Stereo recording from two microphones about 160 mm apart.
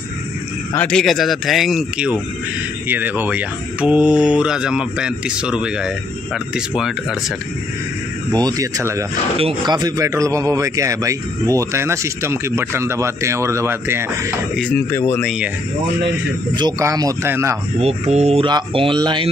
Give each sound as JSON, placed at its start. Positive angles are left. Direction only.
{"t": 0.7, "sound": "a man's voice", "side_deg": 5}
{"t": 8.3, "sound": "speech", "side_deg": -25}
{"t": 9.4, "sound": "a man's voice", "side_deg": -30}
{"t": 14.6, "sound": "speech", "side_deg": 15}
{"t": 15.2, "sound": "speech", "side_deg": -5}
{"t": 16.5, "sound": "speech", "side_deg": -25}
{"t": 17.7, "sound": "speech", "side_deg": -40}